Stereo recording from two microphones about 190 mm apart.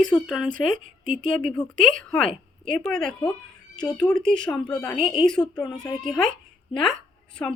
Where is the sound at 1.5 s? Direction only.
5° left (ahead or behind).